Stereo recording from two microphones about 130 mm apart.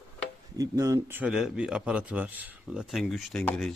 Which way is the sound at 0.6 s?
25° right (ahead or behind).